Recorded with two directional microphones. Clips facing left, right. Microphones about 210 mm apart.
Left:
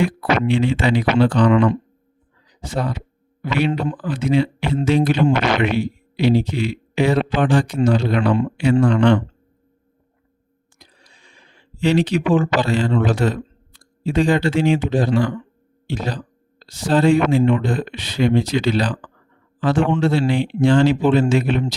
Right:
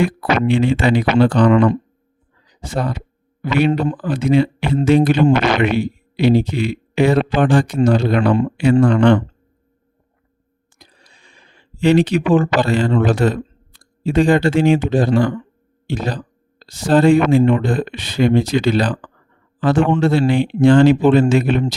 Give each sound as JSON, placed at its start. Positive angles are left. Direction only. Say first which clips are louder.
{"t": 0.0, "sound": "speech", "louder": "right 2 dB", "side_deg": -50}
{"t": 10.8, "sound": "a sound", "louder": "right 2 dB", "side_deg": -55}
{"t": 11.8, "sound": "speech", "louder": "right 4 dB", "side_deg": -55}